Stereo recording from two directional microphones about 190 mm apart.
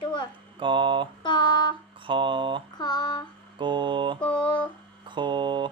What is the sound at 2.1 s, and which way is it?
Speech, 25° right (ahead or behind).